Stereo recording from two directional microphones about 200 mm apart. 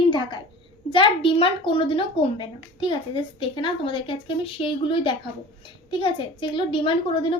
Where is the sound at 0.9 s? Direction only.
25° left (ahead or behind).